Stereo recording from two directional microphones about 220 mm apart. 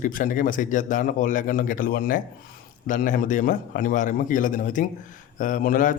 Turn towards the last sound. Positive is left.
turn(degrees=35)  # may be behind; listen again after turning